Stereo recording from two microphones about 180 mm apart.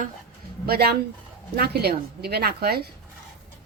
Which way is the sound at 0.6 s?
60° right (ahead or behind).